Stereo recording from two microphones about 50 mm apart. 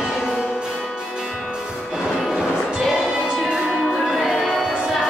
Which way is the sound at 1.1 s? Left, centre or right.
Centre.